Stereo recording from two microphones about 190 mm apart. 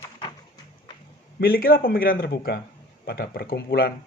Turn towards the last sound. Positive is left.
turn(degrees=50)  # may be behind; listen again after turning